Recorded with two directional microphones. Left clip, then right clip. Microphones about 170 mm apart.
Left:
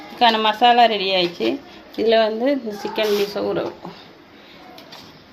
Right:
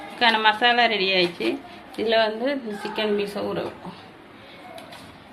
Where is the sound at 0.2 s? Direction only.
45° left (ahead or behind).